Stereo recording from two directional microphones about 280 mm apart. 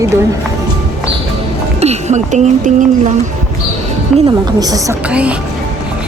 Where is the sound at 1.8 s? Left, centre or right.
Right.